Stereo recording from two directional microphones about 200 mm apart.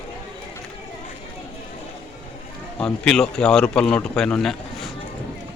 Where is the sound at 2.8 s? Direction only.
5° left (ahead or behind).